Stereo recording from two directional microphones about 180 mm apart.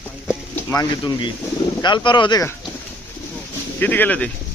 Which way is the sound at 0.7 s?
20° left (ahead or behind).